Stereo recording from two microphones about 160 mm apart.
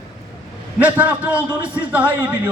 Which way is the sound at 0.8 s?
10° right (ahead or behind).